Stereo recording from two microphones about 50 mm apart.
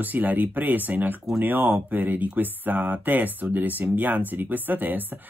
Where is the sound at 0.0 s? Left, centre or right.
Right.